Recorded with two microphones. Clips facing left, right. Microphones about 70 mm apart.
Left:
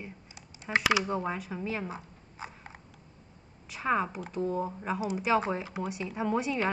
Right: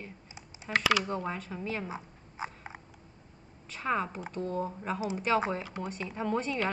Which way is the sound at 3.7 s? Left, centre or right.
Centre.